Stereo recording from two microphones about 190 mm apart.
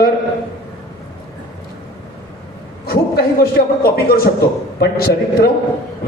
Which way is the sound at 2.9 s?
50° left (ahead or behind).